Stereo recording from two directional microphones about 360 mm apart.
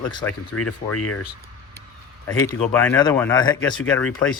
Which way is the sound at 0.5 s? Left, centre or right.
Left.